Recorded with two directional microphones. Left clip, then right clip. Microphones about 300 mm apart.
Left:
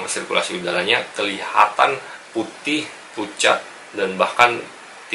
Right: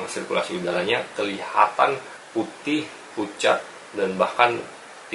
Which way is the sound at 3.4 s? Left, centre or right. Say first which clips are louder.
Left 4 dB; centre.